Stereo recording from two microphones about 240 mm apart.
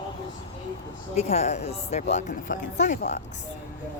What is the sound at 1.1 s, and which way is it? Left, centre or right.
Speech, left.